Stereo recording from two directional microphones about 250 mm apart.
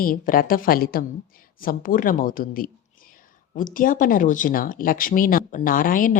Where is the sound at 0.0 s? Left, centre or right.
Left.